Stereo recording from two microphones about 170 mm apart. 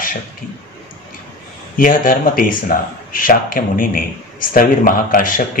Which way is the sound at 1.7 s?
55° left (ahead or behind).